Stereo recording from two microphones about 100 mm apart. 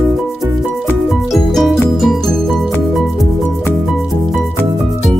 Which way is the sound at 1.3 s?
Centre (ahead or behind).